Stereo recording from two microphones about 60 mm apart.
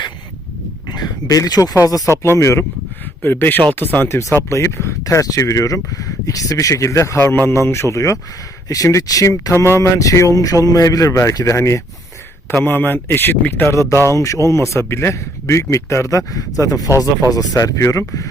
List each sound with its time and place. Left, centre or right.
1.3 s speech: left
2.0 s speech: left
3.2 s a man's voice: left
4.1 s speech: left
5.0 s speech: left
7.2 s speech: left
8.7 s speech: left
10.1 s speech: left
12.5 s a man's voice: left
14.0 s speech: left
15.1 s speech: left